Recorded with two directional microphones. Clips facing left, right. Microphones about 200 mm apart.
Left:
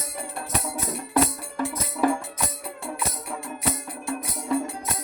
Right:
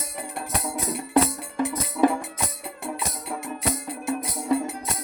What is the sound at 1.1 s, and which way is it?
Music, 20° right (ahead or behind).